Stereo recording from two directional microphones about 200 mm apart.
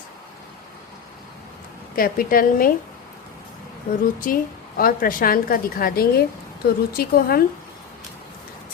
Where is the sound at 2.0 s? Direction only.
45° left (ahead or behind).